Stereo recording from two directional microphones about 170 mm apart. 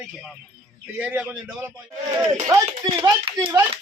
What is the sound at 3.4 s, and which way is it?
Speech, 15° right (ahead or behind).